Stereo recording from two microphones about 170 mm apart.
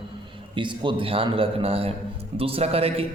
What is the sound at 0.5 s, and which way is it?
A man's voice, 30° right (ahead or behind).